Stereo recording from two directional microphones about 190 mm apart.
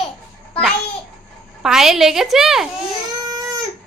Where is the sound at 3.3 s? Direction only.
20° right (ahead or behind).